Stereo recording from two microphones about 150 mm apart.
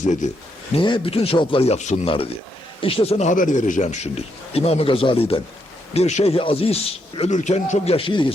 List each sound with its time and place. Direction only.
0.2 s a man's voice: 55° left (ahead or behind)
0.8 s a man's voice: 35° left (ahead or behind)
7.2 s a man's voice: 50° left (ahead or behind); by 8.3 s 35° left (ahead or behind)